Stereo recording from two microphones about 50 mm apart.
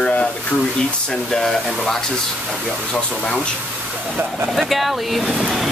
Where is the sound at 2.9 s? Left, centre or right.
Centre.